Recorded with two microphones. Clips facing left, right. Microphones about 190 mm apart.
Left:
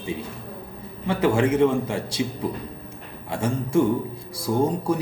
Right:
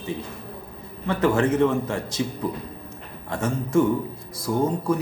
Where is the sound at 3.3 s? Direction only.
10° left (ahead or behind).